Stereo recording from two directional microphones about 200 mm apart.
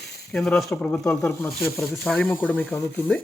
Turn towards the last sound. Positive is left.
turn(degrees=10)  # may be behind; listen again after turning